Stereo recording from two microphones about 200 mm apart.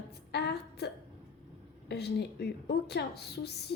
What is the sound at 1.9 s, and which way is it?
A woman's voice, 55° left (ahead or behind).